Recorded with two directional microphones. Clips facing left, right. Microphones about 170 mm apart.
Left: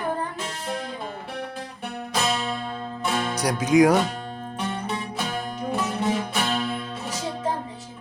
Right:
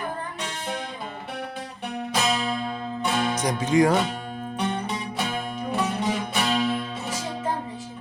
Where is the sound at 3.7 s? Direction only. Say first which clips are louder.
Left 3 dB; 85° left.